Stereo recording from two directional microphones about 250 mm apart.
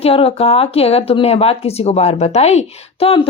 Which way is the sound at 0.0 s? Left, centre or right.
Left.